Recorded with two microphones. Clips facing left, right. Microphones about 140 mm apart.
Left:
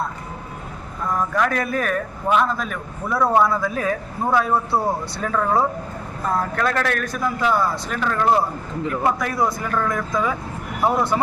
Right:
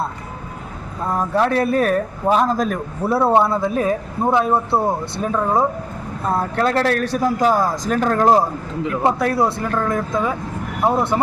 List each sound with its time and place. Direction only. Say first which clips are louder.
1.0 s a man's voice: right 3 dB; 30° right (ahead or behind)